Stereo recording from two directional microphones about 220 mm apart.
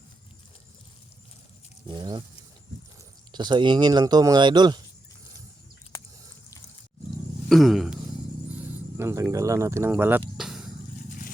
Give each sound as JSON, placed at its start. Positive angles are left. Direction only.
{"t": 1.9, "sound": "speech", "side_deg": -20}
{"t": 3.3, "sound": "speech", "side_deg": -20}
{"t": 7.4, "sound": "a sound", "side_deg": 0}
{"t": 9.0, "sound": "speech", "side_deg": -10}